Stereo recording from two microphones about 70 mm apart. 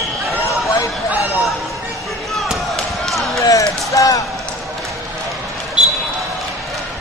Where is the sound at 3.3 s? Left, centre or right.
Left.